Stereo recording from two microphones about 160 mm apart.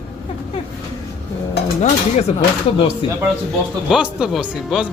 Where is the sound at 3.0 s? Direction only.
30° left (ahead or behind).